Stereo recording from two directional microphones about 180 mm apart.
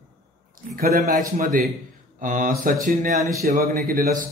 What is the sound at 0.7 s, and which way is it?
A man's voice, 55° right (ahead or behind).